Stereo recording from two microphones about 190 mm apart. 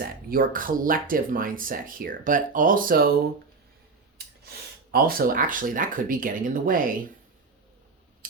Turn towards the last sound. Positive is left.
turn(degrees=-45)  # may be behind; listen again after turning